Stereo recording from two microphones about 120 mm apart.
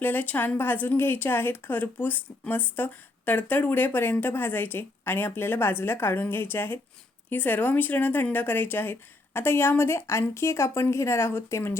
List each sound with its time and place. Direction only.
0.0 s speech: 15° left (ahead or behind)